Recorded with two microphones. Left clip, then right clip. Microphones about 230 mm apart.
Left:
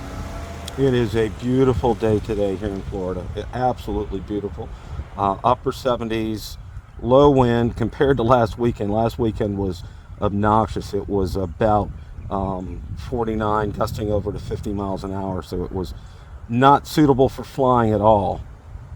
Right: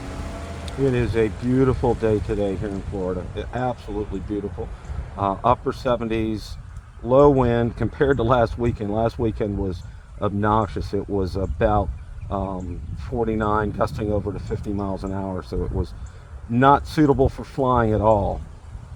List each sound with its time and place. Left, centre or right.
0.0 s vehicle: centre
0.9 s speech: left
2.6 s speech: left
3.1 s speech: left
5.1 s speech: left